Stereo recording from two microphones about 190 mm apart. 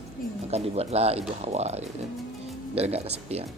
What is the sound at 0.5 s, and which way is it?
Speech, 35° right (ahead or behind).